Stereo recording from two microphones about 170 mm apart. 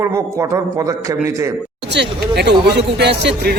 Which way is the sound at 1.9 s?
80° right.